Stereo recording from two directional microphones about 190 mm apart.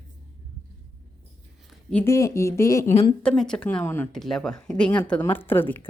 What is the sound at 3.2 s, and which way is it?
Speech, 5° left (ahead or behind).